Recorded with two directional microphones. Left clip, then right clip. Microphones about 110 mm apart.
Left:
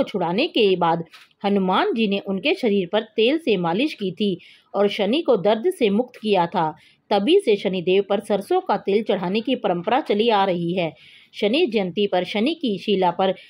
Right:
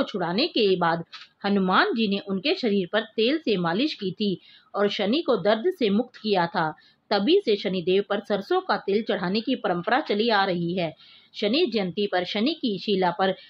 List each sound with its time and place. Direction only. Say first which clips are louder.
0.0 s speech: left 4 dB; 35° left (ahead or behind)